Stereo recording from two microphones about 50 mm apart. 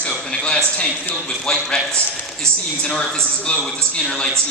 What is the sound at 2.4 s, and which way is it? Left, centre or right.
Speech, right.